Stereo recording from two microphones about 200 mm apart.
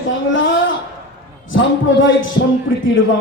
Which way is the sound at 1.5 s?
70° left (ahead or behind).